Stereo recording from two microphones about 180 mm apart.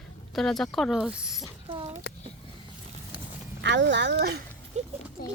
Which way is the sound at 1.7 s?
30° right (ahead or behind).